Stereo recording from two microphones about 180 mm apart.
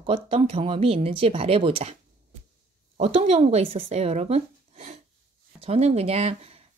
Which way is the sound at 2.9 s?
40° right (ahead or behind).